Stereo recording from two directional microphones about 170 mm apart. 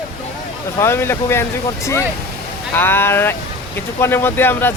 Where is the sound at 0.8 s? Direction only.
15° left (ahead or behind).